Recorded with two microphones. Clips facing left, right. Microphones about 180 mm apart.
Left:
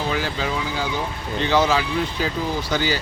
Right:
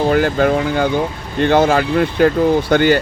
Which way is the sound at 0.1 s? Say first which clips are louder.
Right 11 dB; 55° right (ahead or behind).